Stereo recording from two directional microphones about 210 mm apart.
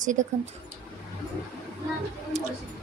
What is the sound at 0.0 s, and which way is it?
Speech, 35° right (ahead or behind).